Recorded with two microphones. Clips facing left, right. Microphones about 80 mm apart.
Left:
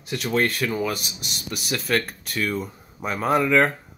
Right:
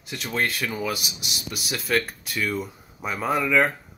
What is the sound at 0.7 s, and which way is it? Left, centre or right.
Speech, centre.